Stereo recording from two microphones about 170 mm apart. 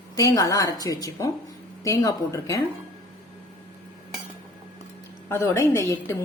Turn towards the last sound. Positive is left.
turn(degrees=15)  # may be behind; listen again after turning